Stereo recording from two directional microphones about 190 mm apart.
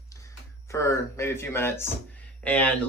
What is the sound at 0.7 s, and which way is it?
Speech, 15° left (ahead or behind).